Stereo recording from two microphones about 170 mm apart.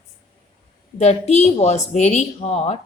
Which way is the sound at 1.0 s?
40° left (ahead or behind).